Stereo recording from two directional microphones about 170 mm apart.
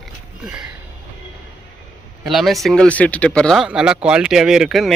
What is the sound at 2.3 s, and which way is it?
Speech, centre (ahead or behind).